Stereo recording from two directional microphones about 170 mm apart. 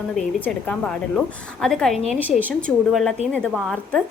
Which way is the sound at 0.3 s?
10° left (ahead or behind).